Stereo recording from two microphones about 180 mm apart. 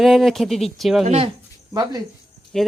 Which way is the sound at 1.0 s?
35° right (ahead or behind).